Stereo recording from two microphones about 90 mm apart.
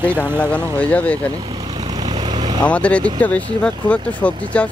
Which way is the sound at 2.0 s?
60° right (ahead or behind).